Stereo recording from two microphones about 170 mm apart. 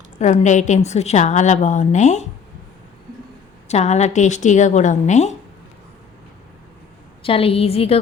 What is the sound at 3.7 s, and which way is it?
A woman's voice, 40° left (ahead or behind).